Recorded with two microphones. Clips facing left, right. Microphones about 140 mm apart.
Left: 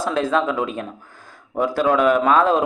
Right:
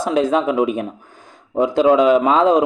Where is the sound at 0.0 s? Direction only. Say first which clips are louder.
Right 3 dB; 15° right (ahead or behind).